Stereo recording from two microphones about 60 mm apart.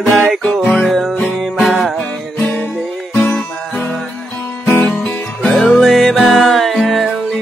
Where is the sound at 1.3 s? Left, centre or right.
Centre.